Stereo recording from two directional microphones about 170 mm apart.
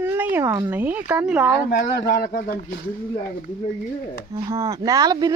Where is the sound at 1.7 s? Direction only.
65° left (ahead or behind).